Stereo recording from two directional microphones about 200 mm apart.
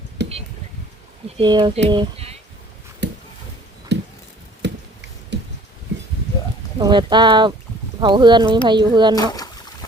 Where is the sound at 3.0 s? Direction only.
60° right (ahead or behind).